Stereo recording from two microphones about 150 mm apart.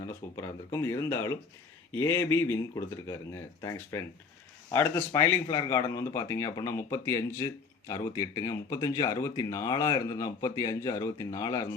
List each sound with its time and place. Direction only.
0.0 s speech: 20° left (ahead or behind)